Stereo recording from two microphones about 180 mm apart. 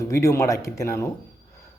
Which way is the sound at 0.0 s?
15° left (ahead or behind).